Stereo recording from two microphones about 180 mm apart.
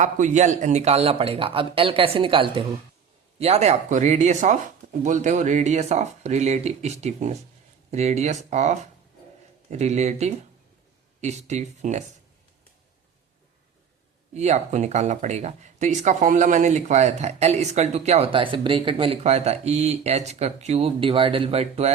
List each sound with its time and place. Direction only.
0.0 s speech: 45° right (ahead or behind)
14.3 s speech: 40° right (ahead or behind)